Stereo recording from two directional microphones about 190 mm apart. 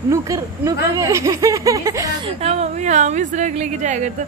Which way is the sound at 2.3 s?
35° right (ahead or behind).